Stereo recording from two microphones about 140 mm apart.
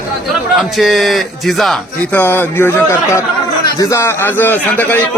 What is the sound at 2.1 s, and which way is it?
A man's voice, 15° left (ahead or behind).